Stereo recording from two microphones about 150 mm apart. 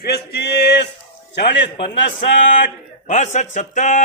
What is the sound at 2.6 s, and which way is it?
A man's voice, 55° left (ahead or behind).